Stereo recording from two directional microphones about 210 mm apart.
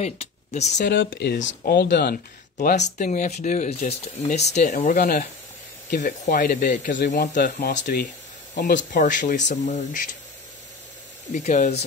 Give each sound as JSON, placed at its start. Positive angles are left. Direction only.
{"t": 0.0, "sound": "speech", "side_deg": 30}
{"t": 0.7, "sound": "speech", "side_deg": 55}
{"t": 2.5, "sound": "speech", "side_deg": 35}
{"t": 8.7, "sound": "speech", "side_deg": 35}
{"t": 11.3, "sound": "speech", "side_deg": 35}